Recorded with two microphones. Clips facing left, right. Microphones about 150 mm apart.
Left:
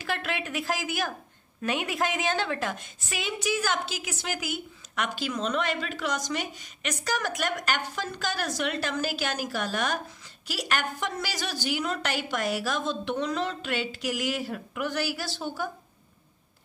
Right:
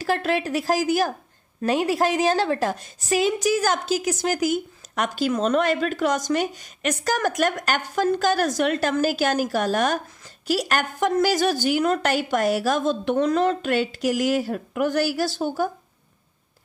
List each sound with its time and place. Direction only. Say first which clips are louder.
0.0 s a woman's voice: right 9 dB; 35° right (ahead or behind)